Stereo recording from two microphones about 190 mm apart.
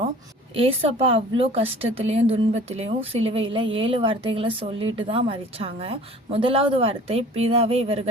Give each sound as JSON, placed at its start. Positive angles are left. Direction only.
{"t": 0.5, "sound": "a woman's voice", "side_deg": -30}